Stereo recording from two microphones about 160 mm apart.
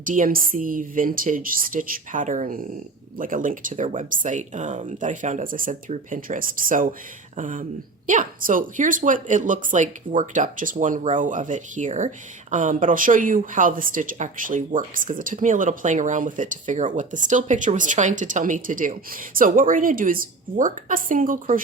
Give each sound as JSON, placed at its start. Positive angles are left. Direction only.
{"t": 0.0, "sound": "speech", "side_deg": -55}